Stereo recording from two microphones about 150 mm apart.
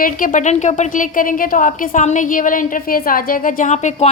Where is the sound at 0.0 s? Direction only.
60° left (ahead or behind).